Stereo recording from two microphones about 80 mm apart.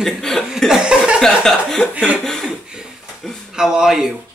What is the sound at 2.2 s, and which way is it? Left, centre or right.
Speech, centre.